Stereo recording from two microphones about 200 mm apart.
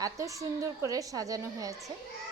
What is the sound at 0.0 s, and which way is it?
A woman's voice, 15° right (ahead or behind).